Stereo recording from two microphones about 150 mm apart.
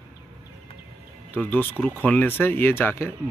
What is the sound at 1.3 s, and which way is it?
Speech, 10° left (ahead or behind).